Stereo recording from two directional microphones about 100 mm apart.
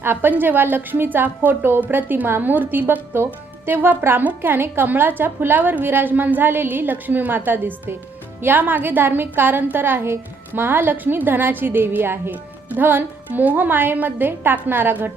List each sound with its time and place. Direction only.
0.0 s a woman's voice: 20° right (ahead or behind)